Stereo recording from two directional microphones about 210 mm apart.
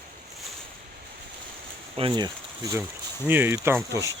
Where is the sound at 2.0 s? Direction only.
20° right (ahead or behind).